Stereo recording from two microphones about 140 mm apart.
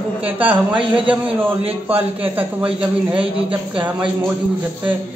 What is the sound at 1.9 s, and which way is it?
A man's voice, 10° right (ahead or behind).